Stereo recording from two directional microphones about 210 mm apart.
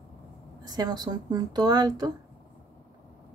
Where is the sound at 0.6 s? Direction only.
20° right (ahead or behind).